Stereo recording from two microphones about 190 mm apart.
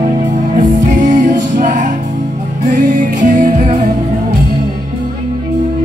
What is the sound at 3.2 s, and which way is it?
Music, 35° right (ahead or behind).